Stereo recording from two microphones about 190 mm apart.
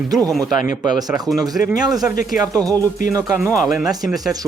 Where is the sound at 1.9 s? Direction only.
Centre (ahead or behind).